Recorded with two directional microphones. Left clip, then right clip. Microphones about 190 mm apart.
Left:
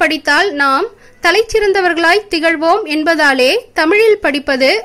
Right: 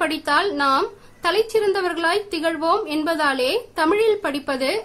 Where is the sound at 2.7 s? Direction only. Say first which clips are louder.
Left 7 dB; 15° left (ahead or behind).